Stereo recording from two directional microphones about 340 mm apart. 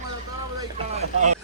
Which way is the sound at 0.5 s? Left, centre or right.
Centre.